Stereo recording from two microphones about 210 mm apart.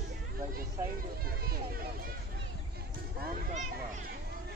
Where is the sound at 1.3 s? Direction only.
45° right (ahead or behind).